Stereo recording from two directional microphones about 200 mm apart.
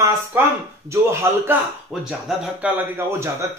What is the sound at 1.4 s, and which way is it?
A man's voice, 5° right (ahead or behind).